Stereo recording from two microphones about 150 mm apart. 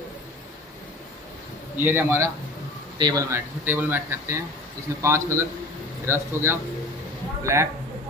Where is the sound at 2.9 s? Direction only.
30° right (ahead or behind).